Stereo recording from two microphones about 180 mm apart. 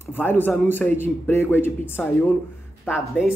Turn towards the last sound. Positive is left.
turn(degrees=10)  # may be behind; listen again after turning